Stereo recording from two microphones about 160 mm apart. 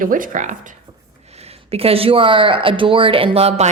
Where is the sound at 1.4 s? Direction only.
40° right (ahead or behind).